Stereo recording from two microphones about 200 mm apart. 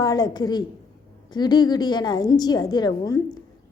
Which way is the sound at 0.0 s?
20° left (ahead or behind).